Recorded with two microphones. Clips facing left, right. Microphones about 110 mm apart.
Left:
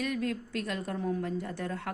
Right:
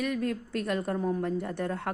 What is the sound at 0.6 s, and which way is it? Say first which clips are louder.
A woman's voice: right 6 dB; 55° right (ahead or behind).